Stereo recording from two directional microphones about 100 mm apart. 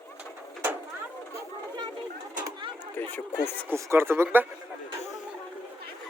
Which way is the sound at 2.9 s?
20° left (ahead or behind).